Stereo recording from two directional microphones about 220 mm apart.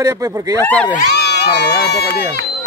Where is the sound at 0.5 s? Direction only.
5° left (ahead or behind).